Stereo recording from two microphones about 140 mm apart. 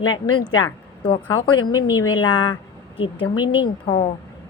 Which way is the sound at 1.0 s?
35° left (ahead or behind).